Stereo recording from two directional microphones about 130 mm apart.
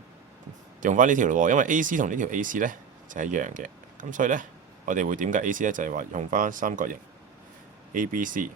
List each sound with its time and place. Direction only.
0.8 s speech: 90° right
7.9 s speech: 90° right